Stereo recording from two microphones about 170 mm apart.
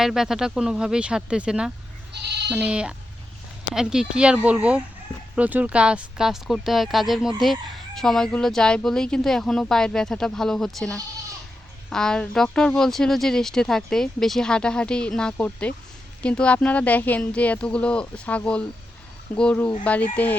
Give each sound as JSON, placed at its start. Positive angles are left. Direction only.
{"t": 0.0, "sound": "speech", "side_deg": 0}
{"t": 2.1, "sound": "sheep", "side_deg": -80}
{"t": 2.5, "sound": "speech", "side_deg": -5}